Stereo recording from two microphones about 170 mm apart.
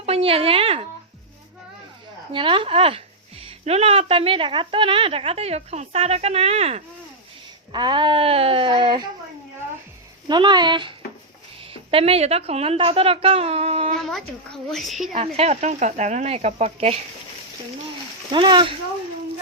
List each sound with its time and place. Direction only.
0.0 s speech: 35° right (ahead or behind)
2.3 s speech: 30° right (ahead or behind)
7.7 s speech: 25° right (ahead or behind)
10.2 s a woman's voice: 25° right (ahead or behind)
14.0 s speech: centre (ahead or behind)
15.1 s speech: 35° right (ahead or behind)
18.3 s speech: 30° right (ahead or behind)